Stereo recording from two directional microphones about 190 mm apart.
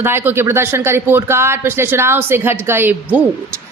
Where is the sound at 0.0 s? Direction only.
10° right (ahead or behind).